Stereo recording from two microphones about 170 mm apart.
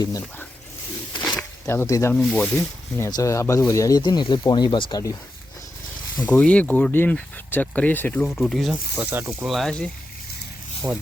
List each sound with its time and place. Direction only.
0.0 s speech: 15° left (ahead or behind)
1.6 s speech: 15° left (ahead or behind)
2.1 s speech: 5° left (ahead or behind)
3.0 s speech: 20° left (ahead or behind)
6.1 s speech: 5° left (ahead or behind)
8.4 s speech: centre (ahead or behind)
9.5 s speech: centre (ahead or behind)